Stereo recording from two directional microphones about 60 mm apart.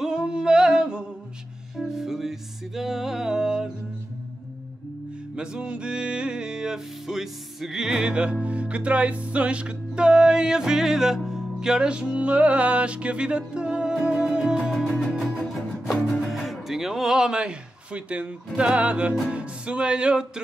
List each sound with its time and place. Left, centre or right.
0.0 s singing: centre
1.8 s music: centre
5.3 s music: centre